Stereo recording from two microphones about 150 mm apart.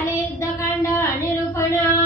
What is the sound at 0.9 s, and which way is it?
Child singing, 15° left (ahead or behind).